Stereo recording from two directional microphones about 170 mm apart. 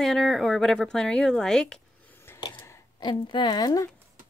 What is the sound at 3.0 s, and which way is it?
Speech, 25° left (ahead or behind).